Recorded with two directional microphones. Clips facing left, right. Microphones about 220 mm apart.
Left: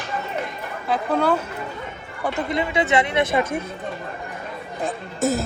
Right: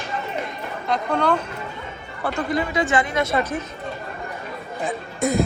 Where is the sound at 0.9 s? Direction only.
5° left (ahead or behind).